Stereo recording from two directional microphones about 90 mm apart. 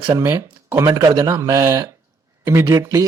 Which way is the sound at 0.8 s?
40° right (ahead or behind).